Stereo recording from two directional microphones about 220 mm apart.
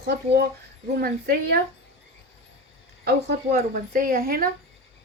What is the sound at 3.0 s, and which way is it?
Speech, 45° right (ahead or behind).